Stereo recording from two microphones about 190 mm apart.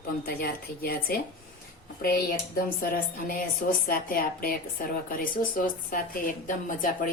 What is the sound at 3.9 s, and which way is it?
A woman's voice, 50° left (ahead or behind).